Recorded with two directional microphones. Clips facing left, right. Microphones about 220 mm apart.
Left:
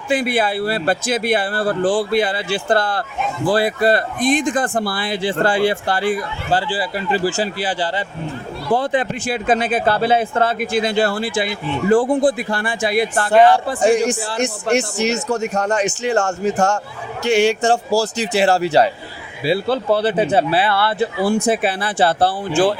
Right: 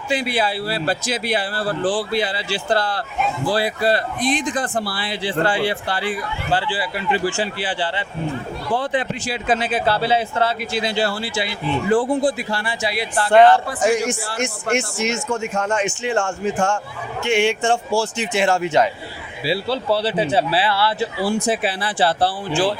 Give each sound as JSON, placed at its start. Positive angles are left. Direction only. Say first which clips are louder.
{"t": 0.1, "sound": "speech", "louder": "left 3 dB", "side_deg": 50}
{"t": 13.7, "sound": "speech", "louder": "left 4 dB", "side_deg": 30}
{"t": 19.5, "sound": "speech", "louder": "left 3 dB", "side_deg": 50}